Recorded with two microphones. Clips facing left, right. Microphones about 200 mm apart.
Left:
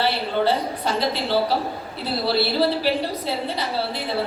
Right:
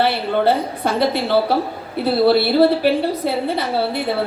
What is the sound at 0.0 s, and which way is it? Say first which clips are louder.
A woman's voice: right 4 dB; 55° right (ahead or behind).